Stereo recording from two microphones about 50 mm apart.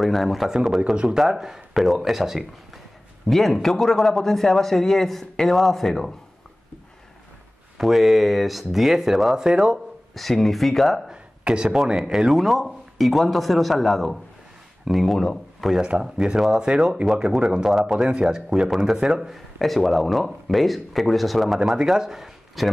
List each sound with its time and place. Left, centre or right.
0.0 s speech: centre
3.3 s a man's voice: centre
7.7 s speech: centre
10.1 s speech: centre
11.1 s speech: centre
15.1 s a man's voice: centre
15.7 s speech: centre
17.6 s speech: centre
19.6 s speech: centre